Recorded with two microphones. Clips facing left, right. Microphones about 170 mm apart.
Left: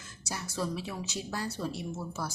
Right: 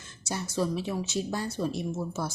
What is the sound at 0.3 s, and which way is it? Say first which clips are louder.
Speech: right 5 dB; 25° right (ahead or behind).